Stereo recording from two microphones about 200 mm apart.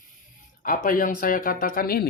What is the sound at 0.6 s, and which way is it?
Speech, 45° left (ahead or behind).